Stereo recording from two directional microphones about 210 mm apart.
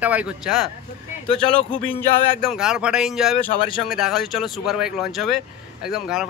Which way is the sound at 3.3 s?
25° left (ahead or behind).